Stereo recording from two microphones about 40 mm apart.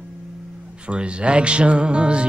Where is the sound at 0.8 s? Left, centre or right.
Right.